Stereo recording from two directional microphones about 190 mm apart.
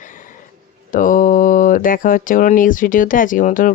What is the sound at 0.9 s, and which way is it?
Speech, 45° left (ahead or behind).